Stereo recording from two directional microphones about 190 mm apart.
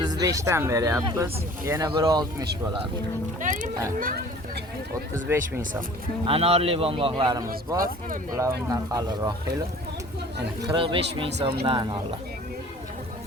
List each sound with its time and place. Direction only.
0.0 s a man's voice: 20° right (ahead or behind)
3.4 s speech: 40° right (ahead or behind)
5.3 s speech: 10° right (ahead or behind)
6.2 s a man's voice: 30° right (ahead or behind)
10.6 s a man's voice: 25° right (ahead or behind)
11.3 s speech: 65° right (ahead or behind)
11.6 s a man's voice: 30° right (ahead or behind)